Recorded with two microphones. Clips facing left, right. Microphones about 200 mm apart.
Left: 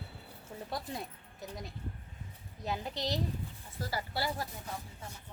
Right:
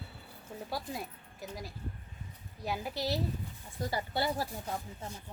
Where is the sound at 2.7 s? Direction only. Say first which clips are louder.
Right 1 dB; 5° right (ahead or behind).